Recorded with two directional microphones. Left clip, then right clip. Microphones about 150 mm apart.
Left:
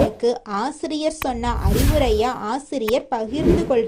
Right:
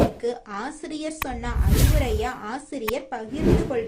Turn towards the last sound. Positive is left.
turn(degrees=0)  # may be behind; listen again after turning